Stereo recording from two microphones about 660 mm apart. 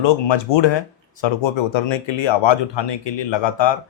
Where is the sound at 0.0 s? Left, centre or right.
Left.